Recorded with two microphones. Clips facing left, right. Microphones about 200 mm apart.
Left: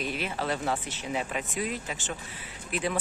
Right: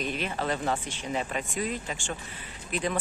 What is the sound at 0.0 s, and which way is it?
Speech, 5° left (ahead or behind).